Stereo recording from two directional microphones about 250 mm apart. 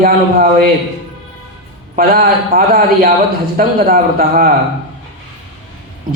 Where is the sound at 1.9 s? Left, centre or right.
Right.